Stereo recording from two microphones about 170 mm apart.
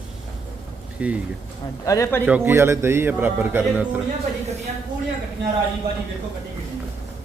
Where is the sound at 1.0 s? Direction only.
10° right (ahead or behind).